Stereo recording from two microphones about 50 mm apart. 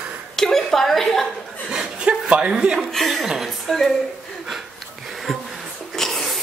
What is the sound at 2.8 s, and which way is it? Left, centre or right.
Speech, centre.